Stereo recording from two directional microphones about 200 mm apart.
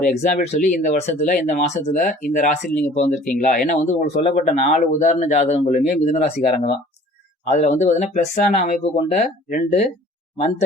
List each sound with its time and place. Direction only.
0.0 s speech: 35° left (ahead or behind)